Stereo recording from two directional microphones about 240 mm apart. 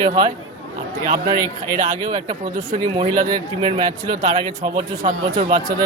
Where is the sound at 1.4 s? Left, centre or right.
Centre.